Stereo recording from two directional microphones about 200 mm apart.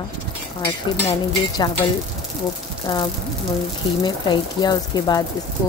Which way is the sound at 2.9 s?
15° left (ahead or behind).